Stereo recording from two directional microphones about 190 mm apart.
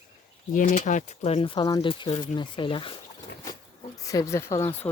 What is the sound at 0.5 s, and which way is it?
Speech, 45° left (ahead or behind).